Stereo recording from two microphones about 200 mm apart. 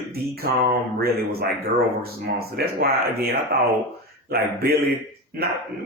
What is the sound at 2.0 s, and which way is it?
Speech, 50° right (ahead or behind).